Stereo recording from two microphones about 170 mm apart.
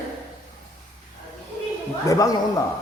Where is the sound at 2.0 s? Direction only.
20° left (ahead or behind).